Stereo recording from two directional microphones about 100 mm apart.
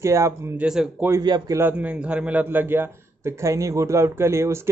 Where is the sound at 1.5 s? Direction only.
20° right (ahead or behind).